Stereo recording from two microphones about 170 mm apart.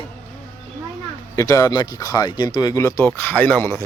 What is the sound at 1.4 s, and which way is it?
Speech, 20° left (ahead or behind).